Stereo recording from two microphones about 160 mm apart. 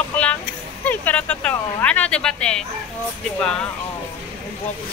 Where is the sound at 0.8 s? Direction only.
10° left (ahead or behind).